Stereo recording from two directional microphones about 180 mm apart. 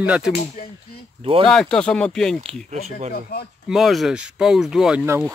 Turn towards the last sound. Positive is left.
turn(degrees=-15)  # may be behind; listen again after turning